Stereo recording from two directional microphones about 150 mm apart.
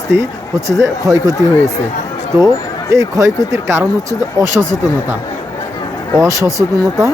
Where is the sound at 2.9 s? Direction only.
25° right (ahead or behind).